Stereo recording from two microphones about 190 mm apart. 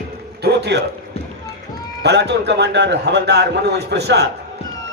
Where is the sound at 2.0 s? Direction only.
60° right (ahead or behind).